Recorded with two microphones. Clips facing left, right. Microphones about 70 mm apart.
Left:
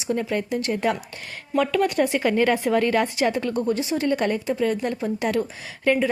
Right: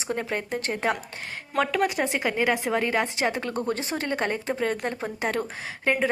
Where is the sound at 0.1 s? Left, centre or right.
Right.